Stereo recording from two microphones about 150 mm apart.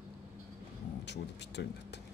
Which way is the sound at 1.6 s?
90° left.